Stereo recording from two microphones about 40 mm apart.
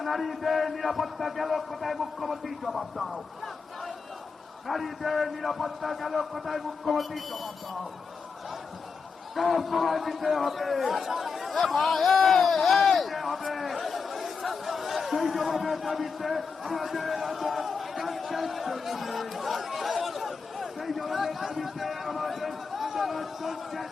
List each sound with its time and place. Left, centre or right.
0.0 s a man's voice: centre
4.6 s a man's voice: centre
9.3 s a man's voice: centre
11.6 s a sound: centre